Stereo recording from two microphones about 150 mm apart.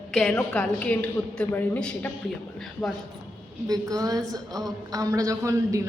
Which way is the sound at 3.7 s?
25° right (ahead or behind).